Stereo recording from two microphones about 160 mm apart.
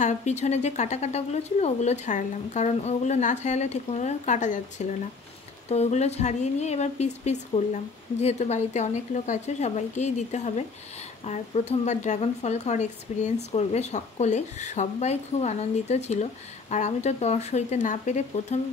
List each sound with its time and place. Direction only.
0.0 s speech: 45° left (ahead or behind)